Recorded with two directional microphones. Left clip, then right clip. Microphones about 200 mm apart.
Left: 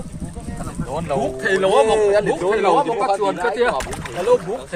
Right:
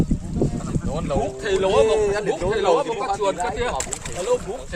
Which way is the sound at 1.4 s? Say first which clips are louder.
Left 4 dB; 45° left (ahead or behind).